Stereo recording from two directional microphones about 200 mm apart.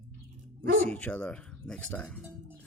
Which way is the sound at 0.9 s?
5° left (ahead or behind).